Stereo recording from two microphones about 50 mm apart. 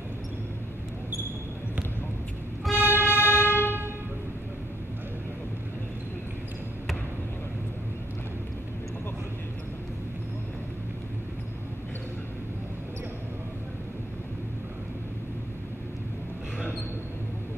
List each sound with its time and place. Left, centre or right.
2.7 s vehicle: right